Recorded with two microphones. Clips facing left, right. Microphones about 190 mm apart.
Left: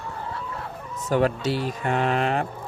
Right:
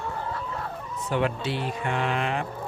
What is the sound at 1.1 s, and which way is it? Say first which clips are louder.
Speech: left 5 dB; 40° left (ahead or behind).